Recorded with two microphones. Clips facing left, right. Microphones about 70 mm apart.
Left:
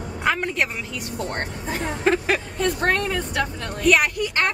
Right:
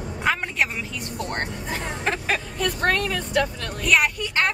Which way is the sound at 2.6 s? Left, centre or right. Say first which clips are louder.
Even; left.